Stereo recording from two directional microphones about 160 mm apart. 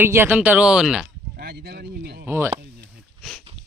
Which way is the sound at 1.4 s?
75° right (ahead or behind).